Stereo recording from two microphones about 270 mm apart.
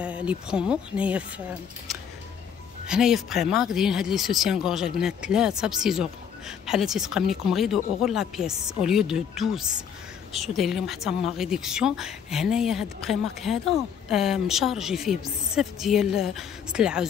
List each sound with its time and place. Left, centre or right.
0.0 s speech: centre
2.9 s speech: centre